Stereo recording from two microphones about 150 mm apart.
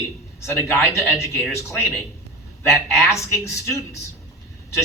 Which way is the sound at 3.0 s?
20° left (ahead or behind).